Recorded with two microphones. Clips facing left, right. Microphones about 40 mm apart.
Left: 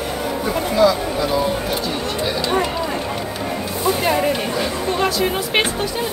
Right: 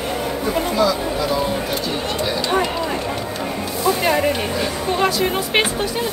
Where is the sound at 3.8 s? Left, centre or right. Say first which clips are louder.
Right 1 dB; centre.